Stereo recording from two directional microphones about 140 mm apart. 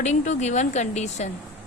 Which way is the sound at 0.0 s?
55° left (ahead or behind).